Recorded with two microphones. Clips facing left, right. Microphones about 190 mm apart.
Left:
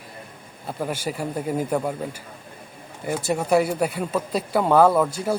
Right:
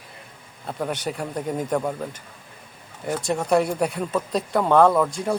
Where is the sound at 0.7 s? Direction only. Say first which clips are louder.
Even; 5° left (ahead or behind).